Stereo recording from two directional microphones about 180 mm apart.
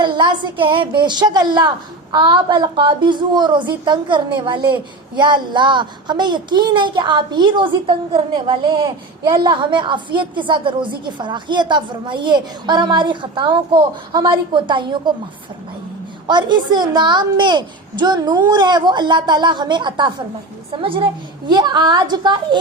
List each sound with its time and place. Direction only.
0.0 s a woman's voice: 25° right (ahead or behind)
16.2 s a woman's voice: 25° right (ahead or behind)